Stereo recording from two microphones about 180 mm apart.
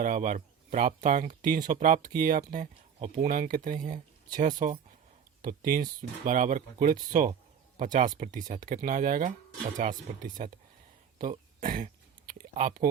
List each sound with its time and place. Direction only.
0.0 s speech: 45° right (ahead or behind)